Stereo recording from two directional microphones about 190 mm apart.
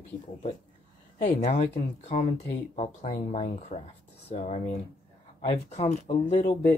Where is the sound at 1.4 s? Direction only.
35° left (ahead or behind).